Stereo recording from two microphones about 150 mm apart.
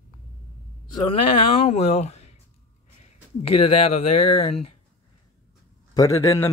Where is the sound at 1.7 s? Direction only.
45° left (ahead or behind).